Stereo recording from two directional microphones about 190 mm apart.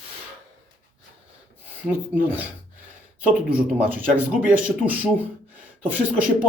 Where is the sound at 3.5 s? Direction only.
10° right (ahead or behind).